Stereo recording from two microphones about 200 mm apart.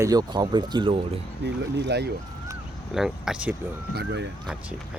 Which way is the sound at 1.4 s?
55° right (ahead or behind).